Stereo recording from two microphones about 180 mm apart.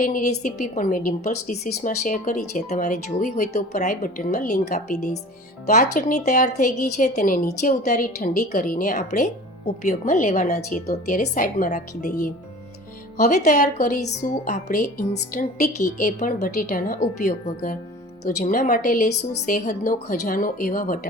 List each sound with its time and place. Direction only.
0.0 s a woman's voice: 45° left (ahead or behind)